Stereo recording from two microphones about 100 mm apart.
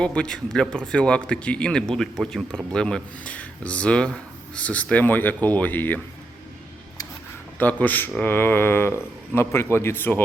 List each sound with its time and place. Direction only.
0.0 s speech: 10° left (ahead or behind)
7.6 s a man's voice: 15° left (ahead or behind)